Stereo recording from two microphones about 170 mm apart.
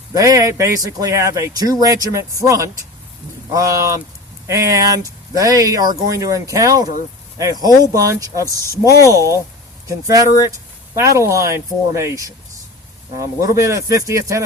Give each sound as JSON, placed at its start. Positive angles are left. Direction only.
{"t": 0.1, "sound": "speech", "side_deg": -20}